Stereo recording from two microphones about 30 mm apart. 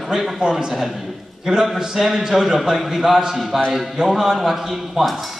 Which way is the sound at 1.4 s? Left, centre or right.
Centre.